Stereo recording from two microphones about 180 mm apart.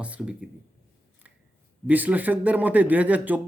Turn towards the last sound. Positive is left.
turn(degrees=-10)  # may be behind; listen again after turning